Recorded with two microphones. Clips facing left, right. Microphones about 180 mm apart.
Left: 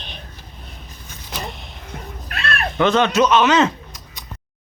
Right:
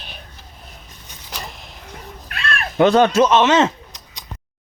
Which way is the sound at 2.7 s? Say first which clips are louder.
Right 4 dB; 40° right (ahead or behind).